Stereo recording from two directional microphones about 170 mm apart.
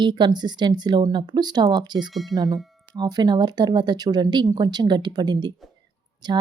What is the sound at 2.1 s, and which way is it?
Speech, centre (ahead or behind).